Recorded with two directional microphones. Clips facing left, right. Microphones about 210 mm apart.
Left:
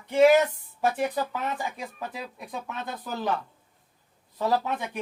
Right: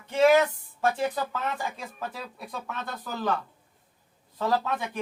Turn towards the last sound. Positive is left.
turn(degrees=15)  # may be behind; listen again after turning